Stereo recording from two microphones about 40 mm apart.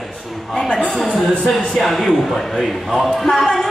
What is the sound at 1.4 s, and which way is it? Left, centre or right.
Speech, centre.